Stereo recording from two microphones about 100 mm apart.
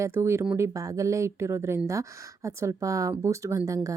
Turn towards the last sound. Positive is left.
turn(degrees=-35)  # may be behind; listen again after turning